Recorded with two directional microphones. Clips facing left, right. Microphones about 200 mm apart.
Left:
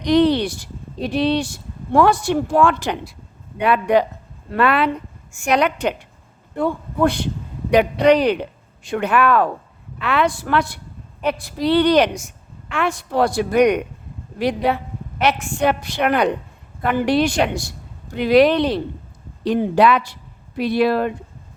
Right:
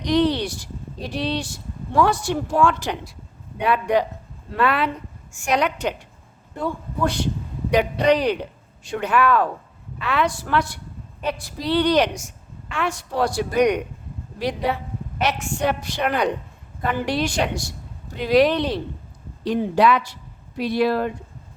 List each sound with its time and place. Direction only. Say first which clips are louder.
0.0 s a woman's voice: left 4 dB; 65° left (ahead or behind)